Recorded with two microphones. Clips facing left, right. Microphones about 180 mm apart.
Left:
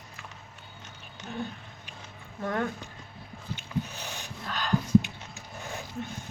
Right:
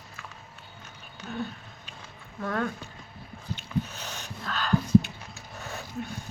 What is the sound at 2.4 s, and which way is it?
Speech, 20° left (ahead or behind).